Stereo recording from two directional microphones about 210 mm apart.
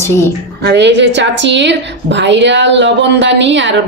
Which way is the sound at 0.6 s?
50° right (ahead or behind).